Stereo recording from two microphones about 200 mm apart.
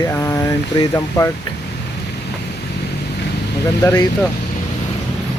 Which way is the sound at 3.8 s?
15° left (ahead or behind).